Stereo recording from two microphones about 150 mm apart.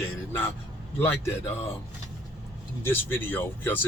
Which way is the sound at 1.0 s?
15° left (ahead or behind).